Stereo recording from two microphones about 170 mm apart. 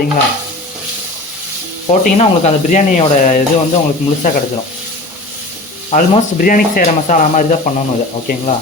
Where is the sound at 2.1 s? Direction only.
40° left (ahead or behind).